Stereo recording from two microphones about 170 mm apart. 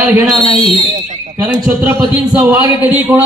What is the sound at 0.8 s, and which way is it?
Speech, 45° right (ahead or behind).